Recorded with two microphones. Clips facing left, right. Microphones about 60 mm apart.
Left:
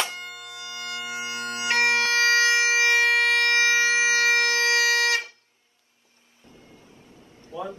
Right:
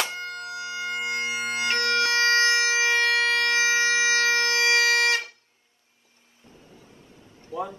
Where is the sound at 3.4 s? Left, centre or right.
Right.